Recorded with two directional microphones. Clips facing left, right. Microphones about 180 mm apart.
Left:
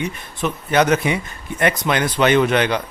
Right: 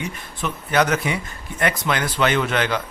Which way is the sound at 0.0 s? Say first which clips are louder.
Left 4 dB; 20° left (ahead or behind).